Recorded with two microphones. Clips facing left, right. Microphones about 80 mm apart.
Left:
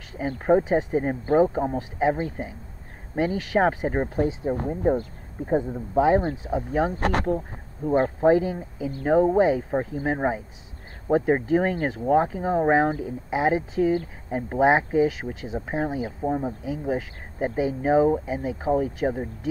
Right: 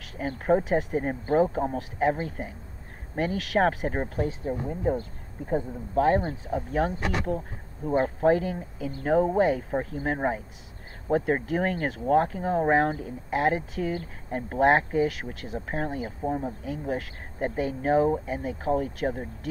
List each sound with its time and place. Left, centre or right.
0.5 s speech: centre
4.8 s speech: left
6.4 s speech: centre
7.0 s speech: left
7.9 s speech: centre